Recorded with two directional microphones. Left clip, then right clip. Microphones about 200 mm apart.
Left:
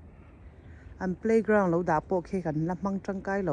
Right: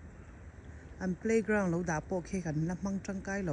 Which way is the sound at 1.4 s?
90° left.